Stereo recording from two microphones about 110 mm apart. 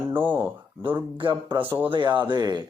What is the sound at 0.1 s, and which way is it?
Speech, 15° right (ahead or behind).